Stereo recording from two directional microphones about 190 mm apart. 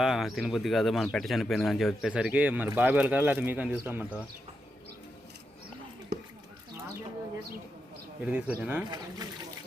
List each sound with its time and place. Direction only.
0.0 s speech: centre (ahead or behind)
6.1 s a sound: 60° right (ahead or behind)
8.2 s speech: 10° right (ahead or behind)